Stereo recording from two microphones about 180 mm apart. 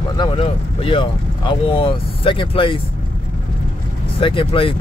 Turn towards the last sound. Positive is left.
turn(degrees=30)  # may be behind; listen again after turning